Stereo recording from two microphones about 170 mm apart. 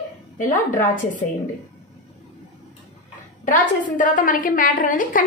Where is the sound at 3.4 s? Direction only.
50° left (ahead or behind).